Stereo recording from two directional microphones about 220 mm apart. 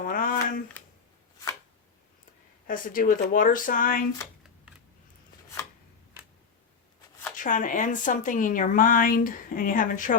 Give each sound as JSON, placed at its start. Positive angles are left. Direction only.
{"t": 0.0, "sound": "a sound", "side_deg": 40}
{"t": 2.6, "sound": "a woman's voice", "side_deg": 40}
{"t": 7.3, "sound": "a woman's voice", "side_deg": 35}